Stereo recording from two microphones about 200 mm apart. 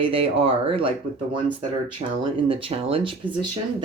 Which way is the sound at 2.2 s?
25° right (ahead or behind).